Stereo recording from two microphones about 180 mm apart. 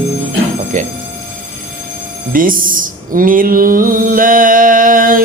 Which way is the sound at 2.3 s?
50° right (ahead or behind).